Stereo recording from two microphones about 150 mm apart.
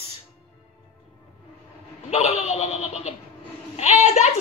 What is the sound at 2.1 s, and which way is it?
A woman's voice, 50° left (ahead or behind).